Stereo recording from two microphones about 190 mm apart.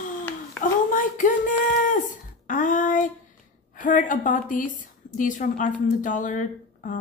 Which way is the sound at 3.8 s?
45° left (ahead or behind).